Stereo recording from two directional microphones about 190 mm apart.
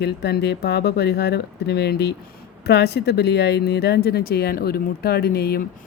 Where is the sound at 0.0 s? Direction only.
60° left (ahead or behind).